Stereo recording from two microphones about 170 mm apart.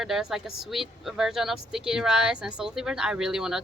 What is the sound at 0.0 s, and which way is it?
Speech, centre (ahead or behind).